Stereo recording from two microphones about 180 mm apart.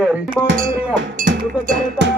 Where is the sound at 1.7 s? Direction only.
75° right (ahead or behind).